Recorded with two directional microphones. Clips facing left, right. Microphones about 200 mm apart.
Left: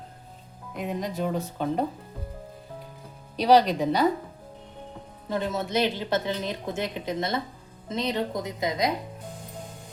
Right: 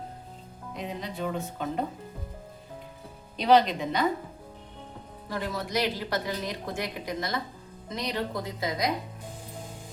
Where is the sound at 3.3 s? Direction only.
35° left (ahead or behind).